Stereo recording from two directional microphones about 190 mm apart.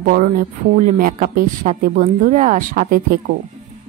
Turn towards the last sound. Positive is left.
turn(degrees=-50)  # may be behind; listen again after turning